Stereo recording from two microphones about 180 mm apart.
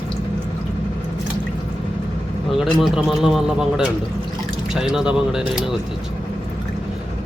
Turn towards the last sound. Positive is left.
turn(degrees=-5)  # may be behind; listen again after turning